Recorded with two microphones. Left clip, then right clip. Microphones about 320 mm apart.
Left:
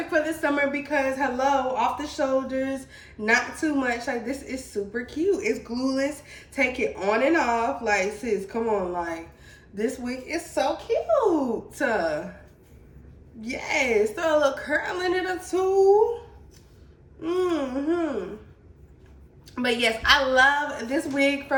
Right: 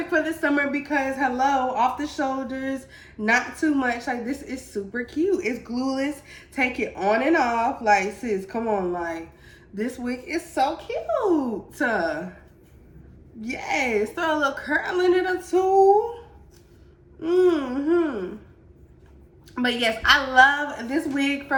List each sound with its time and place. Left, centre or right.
0.1 s a woman's voice: centre
11.7 s a woman's voice: centre
13.4 s a woman's voice: centre
17.2 s a woman's voice: centre
19.5 s a woman's voice: centre